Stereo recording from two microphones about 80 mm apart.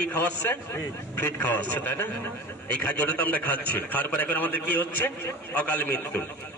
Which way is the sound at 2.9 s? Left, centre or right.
Centre.